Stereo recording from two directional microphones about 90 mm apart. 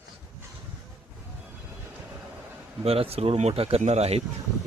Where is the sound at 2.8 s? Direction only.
90° right.